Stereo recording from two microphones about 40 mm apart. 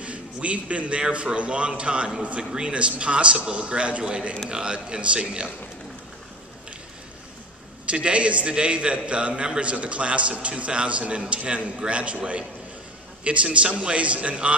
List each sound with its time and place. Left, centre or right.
0.0 s a sound: right
1.1 s a man's voice: right
7.8 s a man's voice: right